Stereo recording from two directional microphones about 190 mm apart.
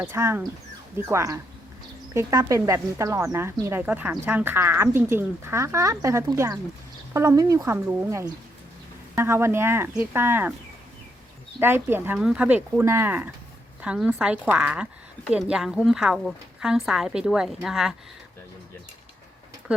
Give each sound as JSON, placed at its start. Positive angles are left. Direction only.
{"t": 0.0, "sound": "speech", "side_deg": -15}
{"t": 11.6, "sound": "a woman's voice", "side_deg": -10}